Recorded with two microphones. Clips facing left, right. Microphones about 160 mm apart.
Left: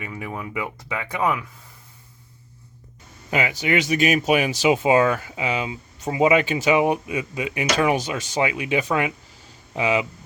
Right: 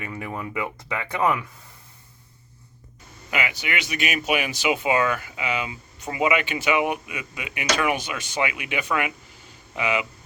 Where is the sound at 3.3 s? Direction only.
35° left (ahead or behind).